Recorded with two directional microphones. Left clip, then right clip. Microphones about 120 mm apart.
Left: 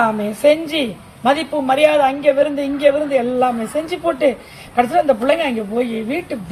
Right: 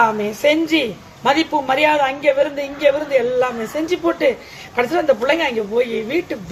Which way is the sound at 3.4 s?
35° right (ahead or behind).